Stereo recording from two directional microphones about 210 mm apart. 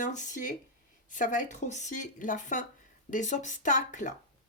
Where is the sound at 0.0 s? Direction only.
35° left (ahead or behind).